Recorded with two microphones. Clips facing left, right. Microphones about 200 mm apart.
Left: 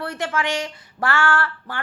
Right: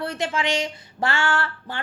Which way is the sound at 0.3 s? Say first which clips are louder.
Left 1 dB; 25° right (ahead or behind).